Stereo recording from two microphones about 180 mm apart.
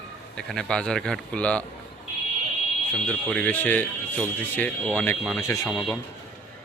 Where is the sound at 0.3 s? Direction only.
5° left (ahead or behind).